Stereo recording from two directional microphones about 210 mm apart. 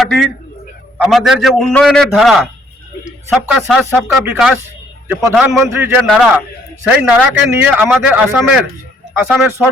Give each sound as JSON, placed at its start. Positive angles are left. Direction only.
{"t": 0.0, "sound": "a man's voice", "side_deg": 0}
{"t": 3.9, "sound": "a man's voice", "side_deg": -5}